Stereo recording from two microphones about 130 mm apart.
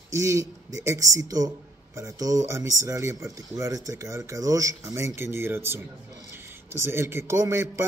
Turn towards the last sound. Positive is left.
turn(degrees=-20)  # may be behind; listen again after turning